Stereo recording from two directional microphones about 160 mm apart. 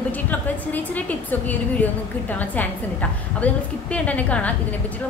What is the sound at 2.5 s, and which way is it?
A woman's voice, 10° left (ahead or behind).